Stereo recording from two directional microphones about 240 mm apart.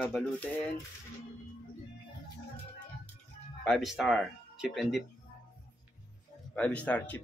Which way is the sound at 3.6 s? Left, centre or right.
Centre.